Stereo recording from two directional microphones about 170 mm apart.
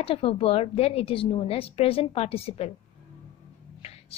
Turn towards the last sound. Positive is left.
turn(degrees=35)  # may be behind; listen again after turning